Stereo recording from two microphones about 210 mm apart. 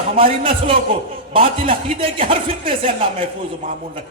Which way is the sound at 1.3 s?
25° right (ahead or behind).